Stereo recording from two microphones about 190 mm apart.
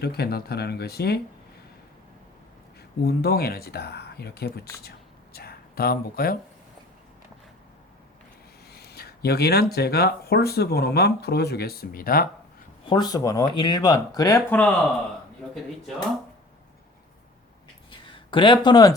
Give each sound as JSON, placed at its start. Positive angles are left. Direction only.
{"t": 0.0, "sound": "speech", "side_deg": 55}
{"t": 3.0, "sound": "speech", "side_deg": 55}
{"t": 4.8, "sound": "a sound", "side_deg": 55}
{"t": 8.7, "sound": "a sound", "side_deg": 55}
{"t": 9.7, "sound": "speech", "side_deg": 55}
{"t": 12.9, "sound": "speech", "side_deg": 20}
{"t": 18.0, "sound": "speech", "side_deg": 25}